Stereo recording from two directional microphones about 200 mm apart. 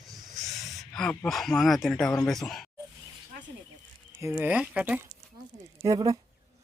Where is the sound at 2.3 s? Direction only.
Centre (ahead or behind).